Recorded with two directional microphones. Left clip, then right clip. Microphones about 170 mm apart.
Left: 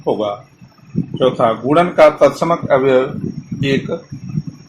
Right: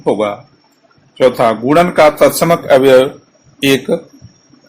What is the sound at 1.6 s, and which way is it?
Speech, 75° right (ahead or behind).